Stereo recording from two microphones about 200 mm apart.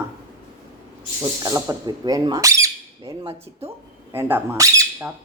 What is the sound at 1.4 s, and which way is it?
Speech, 20° right (ahead or behind).